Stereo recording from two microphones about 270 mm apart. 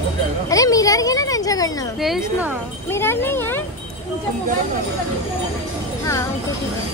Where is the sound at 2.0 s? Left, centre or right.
Centre.